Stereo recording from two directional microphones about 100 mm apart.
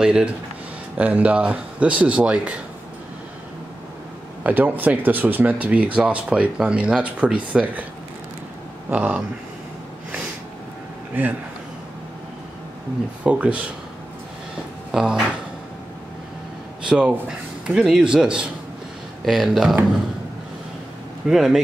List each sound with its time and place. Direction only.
0.0 s speech: 10° right (ahead or behind)
4.4 s speech: 15° right (ahead or behind)
8.9 s speech: 15° right (ahead or behind)
11.2 s a man's voice: 20° right (ahead or behind)
13.2 s speech: 10° right (ahead or behind)
14.9 s speech: 10° right (ahead or behind)
16.8 s speech: 10° right (ahead or behind)
21.3 s speech: 5° right (ahead or behind)